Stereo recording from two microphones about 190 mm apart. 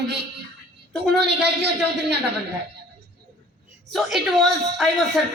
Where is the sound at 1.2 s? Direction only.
60° right (ahead or behind).